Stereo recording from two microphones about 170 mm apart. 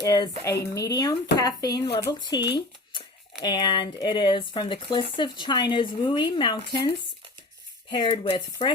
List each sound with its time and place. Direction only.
0.0 s speech: 20° left (ahead or behind)
3.4 s speech: 25° left (ahead or behind)